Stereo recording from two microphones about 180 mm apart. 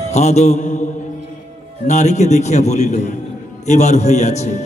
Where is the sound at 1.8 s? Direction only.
40° left (ahead or behind).